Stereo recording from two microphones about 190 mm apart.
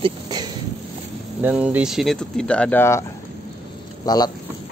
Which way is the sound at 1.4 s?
5° right (ahead or behind).